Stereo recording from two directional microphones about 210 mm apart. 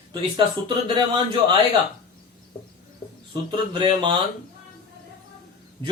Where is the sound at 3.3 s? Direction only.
20° right (ahead or behind).